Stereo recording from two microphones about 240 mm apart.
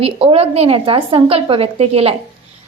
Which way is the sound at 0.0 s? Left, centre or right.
Right.